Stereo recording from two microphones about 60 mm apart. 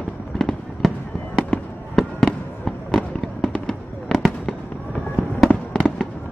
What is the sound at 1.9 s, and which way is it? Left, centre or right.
Fireworks, centre.